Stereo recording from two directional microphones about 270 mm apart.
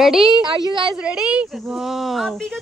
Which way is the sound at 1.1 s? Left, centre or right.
Centre.